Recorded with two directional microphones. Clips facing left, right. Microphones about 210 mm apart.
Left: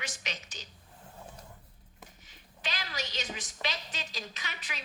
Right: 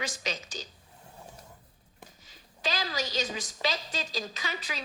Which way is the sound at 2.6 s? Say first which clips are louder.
Right 6 dB; 90° right.